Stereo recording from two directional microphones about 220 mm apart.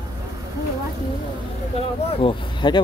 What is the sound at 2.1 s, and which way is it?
Speech, 25° left (ahead or behind).